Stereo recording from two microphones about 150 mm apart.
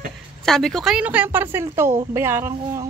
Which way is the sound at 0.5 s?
5° left (ahead or behind).